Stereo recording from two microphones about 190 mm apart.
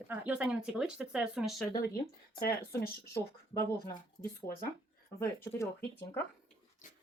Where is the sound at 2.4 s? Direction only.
50° left (ahead or behind).